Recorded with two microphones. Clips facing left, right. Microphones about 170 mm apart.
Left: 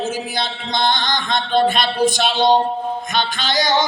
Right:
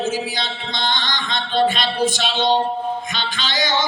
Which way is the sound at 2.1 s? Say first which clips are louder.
Left 4 dB; 45° left (ahead or behind).